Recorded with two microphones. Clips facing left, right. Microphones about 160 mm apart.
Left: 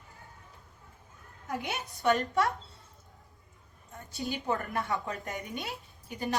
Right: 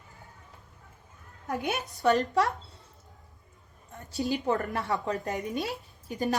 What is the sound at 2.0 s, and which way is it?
Speech, 40° right (ahead or behind).